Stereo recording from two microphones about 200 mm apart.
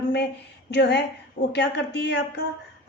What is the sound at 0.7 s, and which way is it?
A woman's voice, 55° left (ahead or behind).